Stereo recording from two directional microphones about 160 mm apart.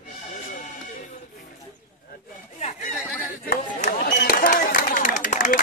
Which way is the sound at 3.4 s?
65° left (ahead or behind).